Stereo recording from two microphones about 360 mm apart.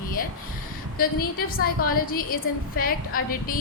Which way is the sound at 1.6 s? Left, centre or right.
Left.